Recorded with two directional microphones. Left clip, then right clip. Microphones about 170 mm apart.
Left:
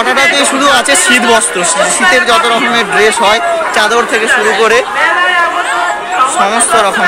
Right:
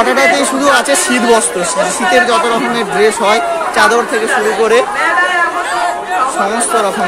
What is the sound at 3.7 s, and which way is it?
Speech, 10° left (ahead or behind).